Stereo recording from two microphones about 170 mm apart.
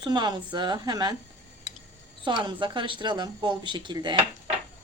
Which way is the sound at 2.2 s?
25° right (ahead or behind).